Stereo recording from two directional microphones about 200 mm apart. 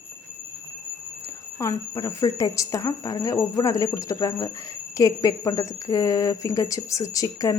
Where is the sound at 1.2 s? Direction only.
15° left (ahead or behind).